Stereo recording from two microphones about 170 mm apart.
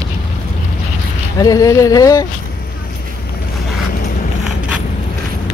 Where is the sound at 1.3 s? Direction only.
20° left (ahead or behind).